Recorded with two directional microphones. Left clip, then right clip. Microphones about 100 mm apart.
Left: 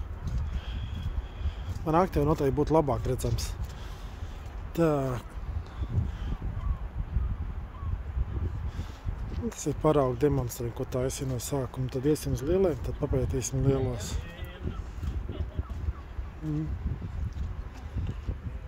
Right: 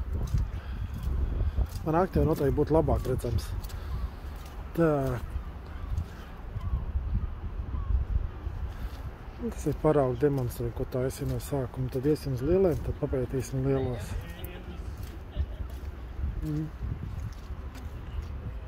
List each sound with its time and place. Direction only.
1.9 s speech: 50° left (ahead or behind); by 3.3 s 35° left (ahead or behind)
4.7 s speech: 25° left (ahead or behind)
9.5 s speech: 20° left (ahead or behind)